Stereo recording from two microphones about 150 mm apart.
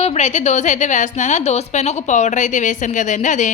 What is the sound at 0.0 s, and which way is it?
A woman's voice, 45° left (ahead or behind).